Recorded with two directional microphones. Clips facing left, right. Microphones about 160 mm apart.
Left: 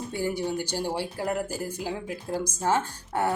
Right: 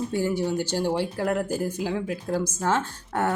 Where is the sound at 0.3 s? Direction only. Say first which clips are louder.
Right 3 dB; 15° left (ahead or behind).